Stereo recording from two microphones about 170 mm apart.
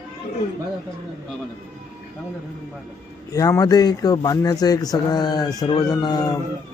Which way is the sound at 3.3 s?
20° left (ahead or behind).